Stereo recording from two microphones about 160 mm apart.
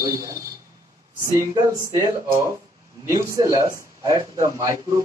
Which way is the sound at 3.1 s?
20° right (ahead or behind).